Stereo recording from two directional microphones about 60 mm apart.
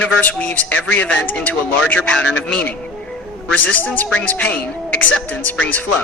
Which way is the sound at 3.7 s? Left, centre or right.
Left.